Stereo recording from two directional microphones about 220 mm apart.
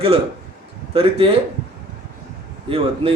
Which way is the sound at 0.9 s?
25° right (ahead or behind).